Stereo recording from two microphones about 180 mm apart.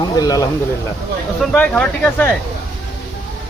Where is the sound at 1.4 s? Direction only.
5° left (ahead or behind).